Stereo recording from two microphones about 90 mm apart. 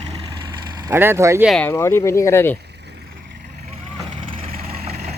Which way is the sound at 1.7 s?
30° left (ahead or behind).